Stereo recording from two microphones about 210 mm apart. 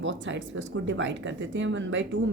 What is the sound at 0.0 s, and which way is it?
A woman's voice, 60° right (ahead or behind).